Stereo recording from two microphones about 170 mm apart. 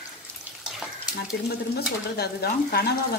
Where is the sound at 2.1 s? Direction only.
70° left (ahead or behind).